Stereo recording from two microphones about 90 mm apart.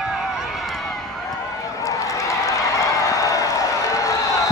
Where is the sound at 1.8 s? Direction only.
35° left (ahead or behind).